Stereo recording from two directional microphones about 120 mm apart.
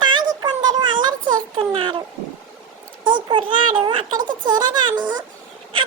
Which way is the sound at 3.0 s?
40° right (ahead or behind).